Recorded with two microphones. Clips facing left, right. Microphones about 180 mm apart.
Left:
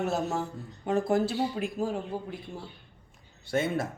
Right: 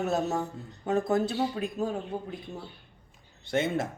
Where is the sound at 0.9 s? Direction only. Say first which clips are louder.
Even; 20° right (ahead or behind).